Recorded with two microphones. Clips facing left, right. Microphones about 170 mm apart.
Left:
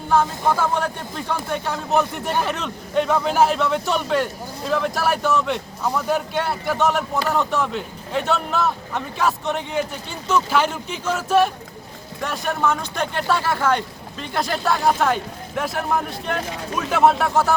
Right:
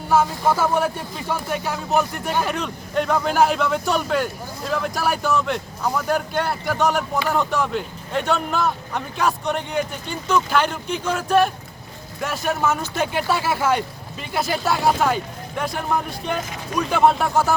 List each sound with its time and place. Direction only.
0.1 s speech: 5° right (ahead or behind)